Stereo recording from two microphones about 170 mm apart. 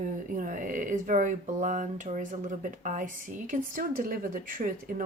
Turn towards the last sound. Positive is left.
turn(degrees=-55)  # may be behind; listen again after turning